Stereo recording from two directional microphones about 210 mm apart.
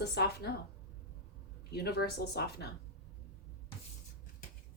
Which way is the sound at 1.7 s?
50° left (ahead or behind).